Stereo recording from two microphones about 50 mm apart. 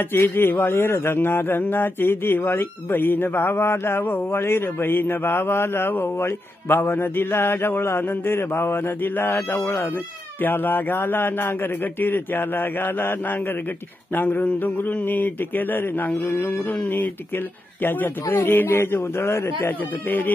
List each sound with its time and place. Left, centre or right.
0.1 s speech: left
9.3 s speech: left
10.4 s speech: left
16.2 s speech: left
16.7 s speech: left
20.1 s speech: left